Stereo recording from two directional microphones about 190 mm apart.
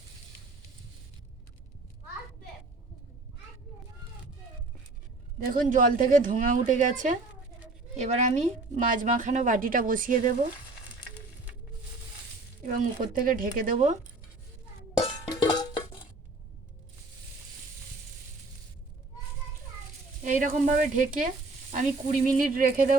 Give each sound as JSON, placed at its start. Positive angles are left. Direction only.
{"t": 5.5, "sound": "speech", "side_deg": -45}
{"t": 12.6, "sound": "speech", "side_deg": -45}
{"t": 14.9, "sound": "music", "side_deg": 25}
{"t": 20.2, "sound": "speech", "side_deg": -45}